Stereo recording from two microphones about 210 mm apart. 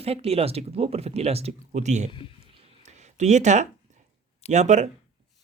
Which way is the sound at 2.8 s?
35° right (ahead or behind).